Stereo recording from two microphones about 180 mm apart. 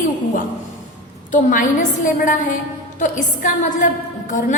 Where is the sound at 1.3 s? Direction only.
45° left (ahead or behind).